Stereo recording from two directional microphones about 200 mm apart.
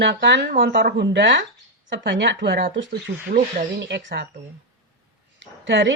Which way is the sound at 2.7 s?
65° right (ahead or behind).